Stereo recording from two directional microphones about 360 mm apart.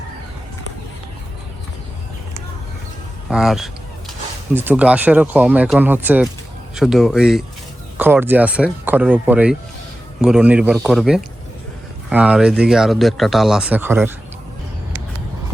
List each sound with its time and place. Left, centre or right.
3.2 s speech: centre